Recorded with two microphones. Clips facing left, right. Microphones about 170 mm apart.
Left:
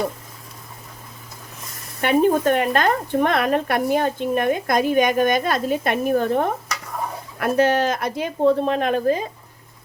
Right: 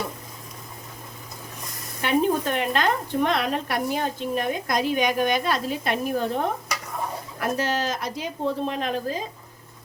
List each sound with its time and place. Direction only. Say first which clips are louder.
2.0 s speech: left 5 dB; 55° left (ahead or behind)